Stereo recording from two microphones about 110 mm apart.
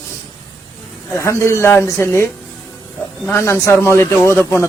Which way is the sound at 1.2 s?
25° left (ahead or behind).